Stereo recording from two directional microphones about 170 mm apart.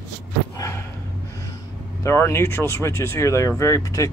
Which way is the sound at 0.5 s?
15° left (ahead or behind).